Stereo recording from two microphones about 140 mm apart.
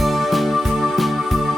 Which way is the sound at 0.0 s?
Centre (ahead or behind).